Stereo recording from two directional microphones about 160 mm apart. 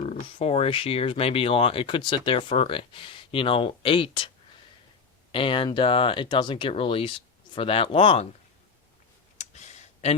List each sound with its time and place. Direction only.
0.3 s speech: 35° left (ahead or behind)
5.3 s speech: 35° left (ahead or behind)
9.4 s a sound: 45° left (ahead or behind)